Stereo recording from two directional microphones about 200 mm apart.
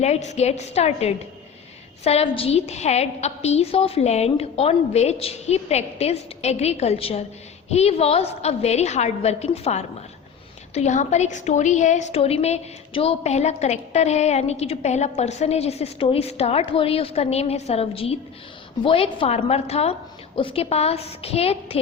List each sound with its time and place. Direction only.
0.0 s a woman's voice: 35° left (ahead or behind)